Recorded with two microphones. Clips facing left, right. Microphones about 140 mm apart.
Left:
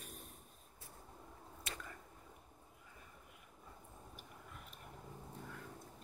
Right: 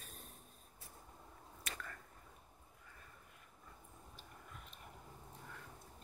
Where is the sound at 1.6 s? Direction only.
20° left (ahead or behind).